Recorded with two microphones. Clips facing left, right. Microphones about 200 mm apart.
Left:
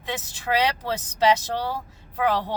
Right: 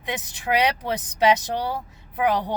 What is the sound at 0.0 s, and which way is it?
Speech, 15° right (ahead or behind).